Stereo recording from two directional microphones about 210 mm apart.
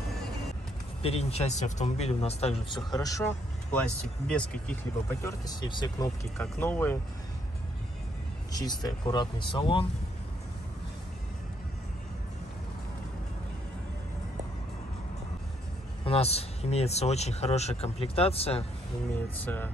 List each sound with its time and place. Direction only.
1.0 s speech: 30° left (ahead or behind)
2.9 s speech: 15° left (ahead or behind)
4.3 s speech: 5° left (ahead or behind)
5.2 s speech: 20° left (ahead or behind)
8.5 s speech: 20° left (ahead or behind)
16.0 s speech: 30° left (ahead or behind)
19.1 s speech: 10° left (ahead or behind)